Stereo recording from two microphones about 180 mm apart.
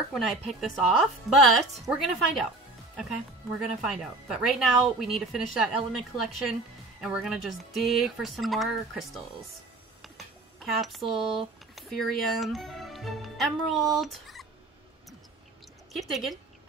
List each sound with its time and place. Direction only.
0.1 s speech: centre (ahead or behind)
3.8 s speech: 5° right (ahead or behind)
10.0 s speech: centre (ahead or behind)
15.9 s speech: centre (ahead or behind)